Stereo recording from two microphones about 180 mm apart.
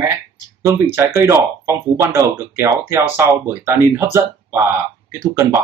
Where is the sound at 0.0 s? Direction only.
15° right (ahead or behind).